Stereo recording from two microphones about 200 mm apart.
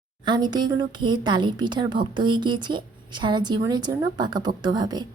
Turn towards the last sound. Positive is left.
turn(degrees=-20)  # may be behind; listen again after turning